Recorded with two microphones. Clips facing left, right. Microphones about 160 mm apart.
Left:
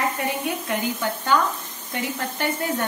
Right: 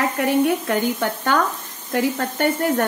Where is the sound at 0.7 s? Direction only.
55° right (ahead or behind).